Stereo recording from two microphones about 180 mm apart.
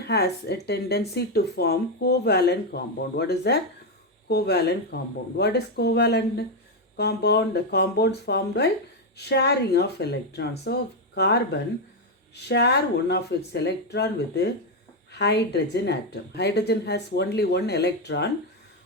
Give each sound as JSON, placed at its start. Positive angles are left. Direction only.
{"t": 0.0, "sound": "a woman's voice", "side_deg": 65}